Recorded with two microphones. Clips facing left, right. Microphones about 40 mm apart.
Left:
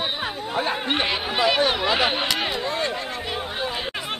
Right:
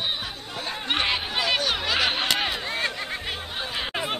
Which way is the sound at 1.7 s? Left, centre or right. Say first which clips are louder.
Left 3 dB; centre.